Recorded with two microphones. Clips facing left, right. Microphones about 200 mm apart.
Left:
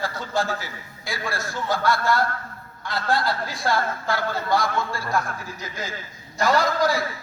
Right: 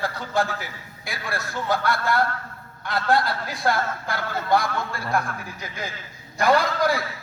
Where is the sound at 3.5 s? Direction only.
60° right (ahead or behind).